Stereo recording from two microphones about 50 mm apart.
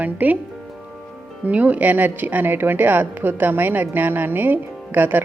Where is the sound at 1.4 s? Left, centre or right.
Right.